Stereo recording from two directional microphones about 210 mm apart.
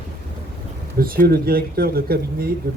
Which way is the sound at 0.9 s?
45° right (ahead or behind).